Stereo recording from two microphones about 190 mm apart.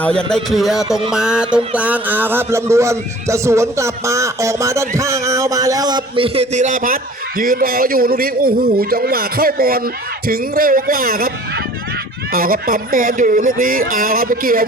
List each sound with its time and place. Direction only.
0.0 s speech: 5° left (ahead or behind); by 14.6 s 50° right (ahead or behind)